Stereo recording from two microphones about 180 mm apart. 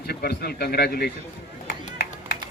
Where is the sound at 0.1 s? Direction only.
60° left (ahead or behind).